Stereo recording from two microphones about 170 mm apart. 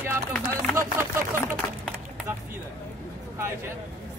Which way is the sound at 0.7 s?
15° right (ahead or behind).